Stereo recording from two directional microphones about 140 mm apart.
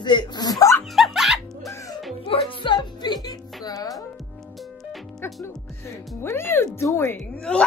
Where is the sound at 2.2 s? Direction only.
40° left (ahead or behind).